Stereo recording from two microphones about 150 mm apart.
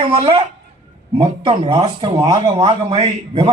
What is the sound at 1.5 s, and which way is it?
Speech, 35° right (ahead or behind).